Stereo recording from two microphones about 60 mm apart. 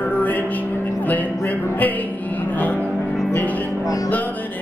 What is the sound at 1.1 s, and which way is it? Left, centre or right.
Speech, left.